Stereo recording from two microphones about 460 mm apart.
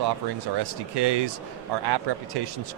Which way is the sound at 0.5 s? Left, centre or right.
Right.